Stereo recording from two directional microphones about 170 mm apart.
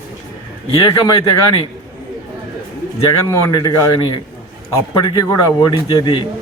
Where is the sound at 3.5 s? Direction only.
20° left (ahead or behind).